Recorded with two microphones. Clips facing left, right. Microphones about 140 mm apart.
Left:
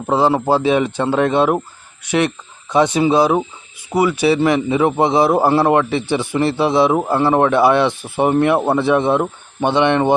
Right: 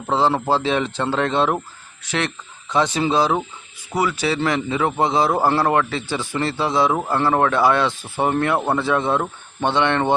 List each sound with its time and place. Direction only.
0.1 s speech: 15° left (ahead or behind)